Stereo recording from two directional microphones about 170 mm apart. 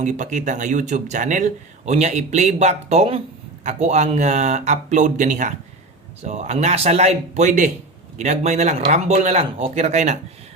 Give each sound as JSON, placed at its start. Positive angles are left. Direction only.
{"t": 0.0, "sound": "speech", "side_deg": -45}